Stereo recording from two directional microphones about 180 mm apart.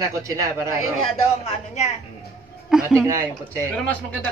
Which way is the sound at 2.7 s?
5° right (ahead or behind).